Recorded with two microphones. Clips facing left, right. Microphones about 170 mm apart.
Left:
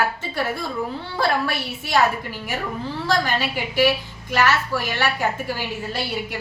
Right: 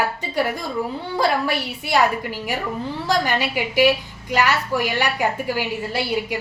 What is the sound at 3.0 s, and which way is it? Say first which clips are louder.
A woman's voice: right 1 dB; 15° right (ahead or behind).